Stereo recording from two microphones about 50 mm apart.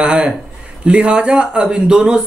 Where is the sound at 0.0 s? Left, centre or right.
Centre.